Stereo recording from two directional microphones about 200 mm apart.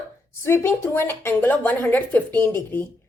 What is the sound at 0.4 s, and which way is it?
A woman's voice, 10° left (ahead or behind).